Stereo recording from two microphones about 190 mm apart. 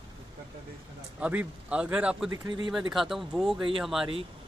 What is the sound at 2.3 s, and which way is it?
Speech, 25° right (ahead or behind).